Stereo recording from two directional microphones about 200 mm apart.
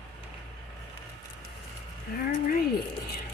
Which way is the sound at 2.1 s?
50° left (ahead or behind).